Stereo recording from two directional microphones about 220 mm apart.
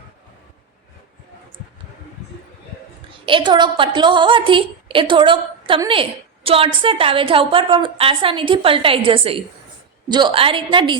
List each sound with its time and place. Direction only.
3.1 s a woman's voice: 20° right (ahead or behind)